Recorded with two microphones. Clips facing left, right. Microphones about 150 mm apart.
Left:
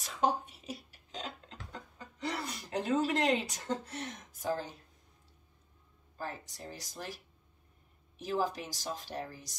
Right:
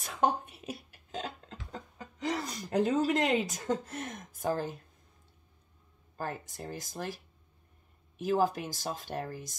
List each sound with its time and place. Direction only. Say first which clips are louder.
0.0 s a sound: right 2 dB; 55° right (ahead or behind)
2.4 s speech: right 6 dB; 40° right (ahead or behind)
6.1 s speech: right 4 dB; 50° right (ahead or behind)
8.3 s speech: right 5 dB; 50° right (ahead or behind)